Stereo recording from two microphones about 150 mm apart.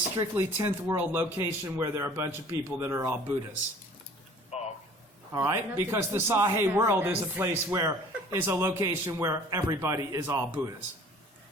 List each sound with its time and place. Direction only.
0.2 s a man's voice: 20° right (ahead or behind)
4.5 s a sound: 45° left (ahead or behind)
5.3 s a man's voice: 15° right (ahead or behind)